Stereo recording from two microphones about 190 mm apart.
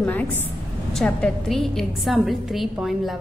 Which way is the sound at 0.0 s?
10° left (ahead or behind).